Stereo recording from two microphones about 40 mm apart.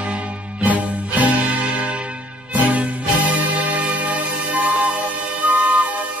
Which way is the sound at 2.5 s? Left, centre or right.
Right.